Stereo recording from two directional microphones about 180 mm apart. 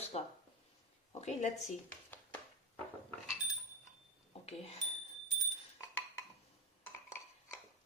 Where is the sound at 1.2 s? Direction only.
40° left (ahead or behind).